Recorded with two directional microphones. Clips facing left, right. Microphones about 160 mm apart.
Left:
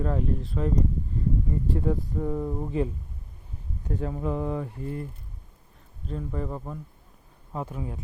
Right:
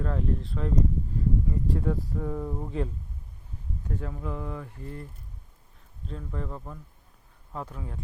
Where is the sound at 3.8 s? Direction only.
35° left (ahead or behind).